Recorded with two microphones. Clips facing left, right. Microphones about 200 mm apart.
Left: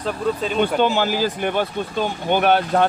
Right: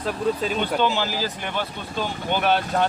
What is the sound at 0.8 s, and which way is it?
Speech, 50° left (ahead or behind).